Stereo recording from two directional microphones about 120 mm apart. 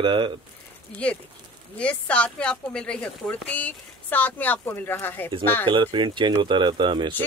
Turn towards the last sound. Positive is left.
turn(degrees=-40)  # may be behind; listen again after turning